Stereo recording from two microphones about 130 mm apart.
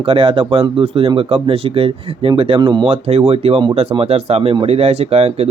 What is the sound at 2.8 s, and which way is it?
Speech, 50° right (ahead or behind).